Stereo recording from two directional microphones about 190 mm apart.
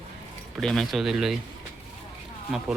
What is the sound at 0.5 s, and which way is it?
Speech, 5° left (ahead or behind).